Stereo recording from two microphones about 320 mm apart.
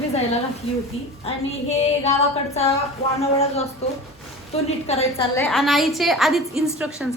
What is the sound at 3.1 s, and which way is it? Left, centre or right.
Speech, centre.